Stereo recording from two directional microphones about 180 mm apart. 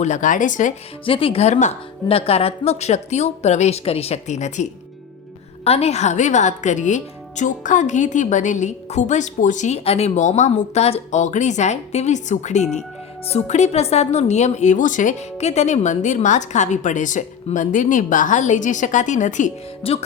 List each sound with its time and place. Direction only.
0.0 s speech: 45° left (ahead or behind)
1.0 s a woman's voice: 30° left (ahead or behind)